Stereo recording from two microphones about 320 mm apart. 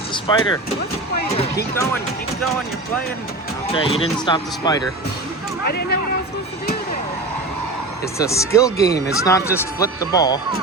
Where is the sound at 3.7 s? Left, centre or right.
Centre.